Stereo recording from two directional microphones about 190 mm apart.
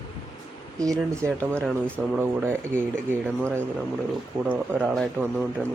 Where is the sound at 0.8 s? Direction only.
15° right (ahead or behind).